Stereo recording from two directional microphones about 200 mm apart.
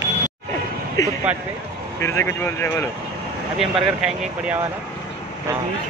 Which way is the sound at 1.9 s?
15° left (ahead or behind).